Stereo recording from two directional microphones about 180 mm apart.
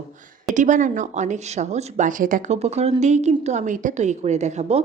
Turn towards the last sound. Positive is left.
turn(degrees=-40)  # may be behind; listen again after turning